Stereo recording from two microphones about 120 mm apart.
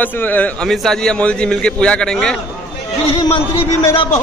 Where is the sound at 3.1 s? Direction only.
50° left (ahead or behind).